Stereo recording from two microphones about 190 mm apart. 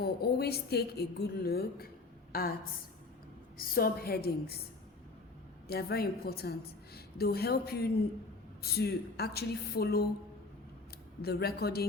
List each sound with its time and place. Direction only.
0.0 s a woman's voice: 55° left (ahead or behind)
3.6 s a woman's voice: 50° left (ahead or behind)
5.6 s a woman's voice: 55° left (ahead or behind)
11.2 s a woman's voice: 55° left (ahead or behind)